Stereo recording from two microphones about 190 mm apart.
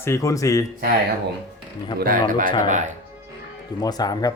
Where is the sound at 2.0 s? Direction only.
45° right (ahead or behind).